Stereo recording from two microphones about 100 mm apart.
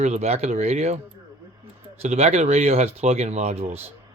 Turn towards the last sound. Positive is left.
turn(degrees=-90)